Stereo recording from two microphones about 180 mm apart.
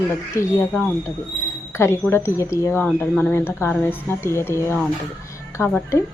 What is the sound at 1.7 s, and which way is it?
Speech, 15° left (ahead or behind).